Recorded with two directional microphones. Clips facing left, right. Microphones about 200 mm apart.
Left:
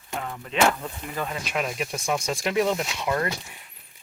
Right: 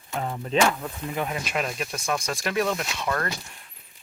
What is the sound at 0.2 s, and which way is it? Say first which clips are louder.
Speech: right 6 dB; 30° right (ahead or behind).